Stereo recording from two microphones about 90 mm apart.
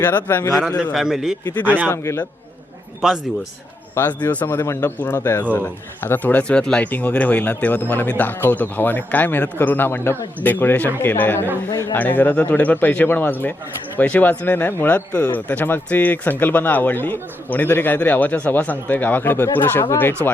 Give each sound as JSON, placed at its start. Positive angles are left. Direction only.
{"t": 0.0, "sound": "speech", "side_deg": 20}
{"t": 0.8, "sound": "a man's voice", "side_deg": -5}
{"t": 1.6, "sound": "speech", "side_deg": -20}
{"t": 1.9, "sound": "a man's voice", "side_deg": 30}
{"t": 3.0, "sound": "a man's voice", "side_deg": -5}
{"t": 3.9, "sound": "speech", "side_deg": 20}
{"t": 4.6, "sound": "speech", "side_deg": 30}